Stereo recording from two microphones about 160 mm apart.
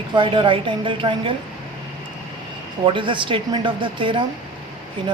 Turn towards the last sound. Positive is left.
turn(degrees=-30)  # may be behind; listen again after turning